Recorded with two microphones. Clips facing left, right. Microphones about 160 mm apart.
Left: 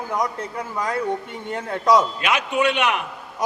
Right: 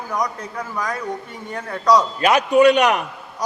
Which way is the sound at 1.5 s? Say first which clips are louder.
Right 1 dB; 25° left (ahead or behind).